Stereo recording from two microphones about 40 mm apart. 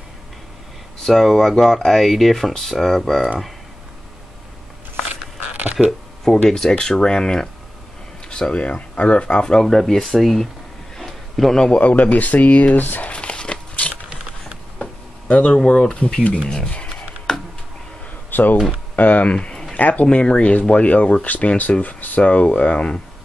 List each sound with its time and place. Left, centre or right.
1.0 s speech: centre
5.5 s a sound: right
6.5 s speech: centre
9.7 s speech: centre
11.0 s a sound: centre
11.5 s speech: centre
11.8 s speech: left
13.1 s a sound: left
15.2 s speech: left
16.4 s speech: centre
17.3 s a sound: centre
18.3 s speech: left
20.1 s speech: left